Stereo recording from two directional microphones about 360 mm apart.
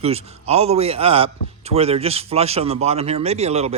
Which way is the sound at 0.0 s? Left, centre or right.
Centre.